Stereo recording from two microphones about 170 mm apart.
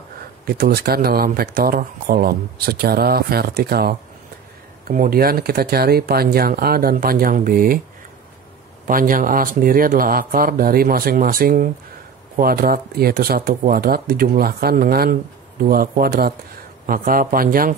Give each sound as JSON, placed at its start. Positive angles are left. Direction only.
{"t": 0.5, "sound": "speech", "side_deg": -70}
{"t": 4.8, "sound": "speech", "side_deg": -55}
{"t": 8.8, "sound": "speech", "side_deg": -55}